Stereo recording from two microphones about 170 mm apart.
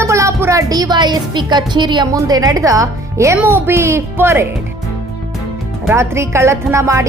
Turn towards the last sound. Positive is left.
turn(degrees=-15)  # may be behind; listen again after turning